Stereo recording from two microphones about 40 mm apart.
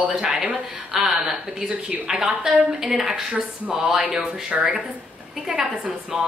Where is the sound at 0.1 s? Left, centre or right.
Centre.